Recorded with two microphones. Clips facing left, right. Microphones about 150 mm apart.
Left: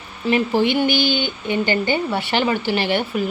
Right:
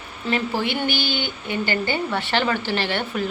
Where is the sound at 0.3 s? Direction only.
15° left (ahead or behind).